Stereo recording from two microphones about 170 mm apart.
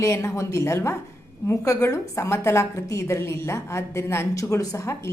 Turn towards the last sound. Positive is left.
turn(degrees=20)  # may be behind; listen again after turning